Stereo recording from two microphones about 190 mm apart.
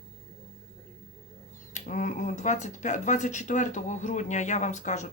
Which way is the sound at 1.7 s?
40° left (ahead or behind).